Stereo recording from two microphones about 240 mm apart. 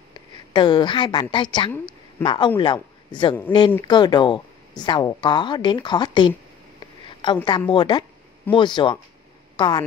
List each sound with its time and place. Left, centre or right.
0.1 s a woman's voice: centre
1.7 s a sound: centre
2.2 s speech: centre
7.3 s a woman's voice: centre